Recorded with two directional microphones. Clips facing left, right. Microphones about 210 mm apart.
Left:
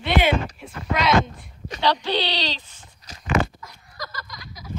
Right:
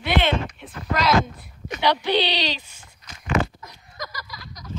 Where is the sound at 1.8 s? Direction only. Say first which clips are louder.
Right 2 dB; 15° right (ahead or behind).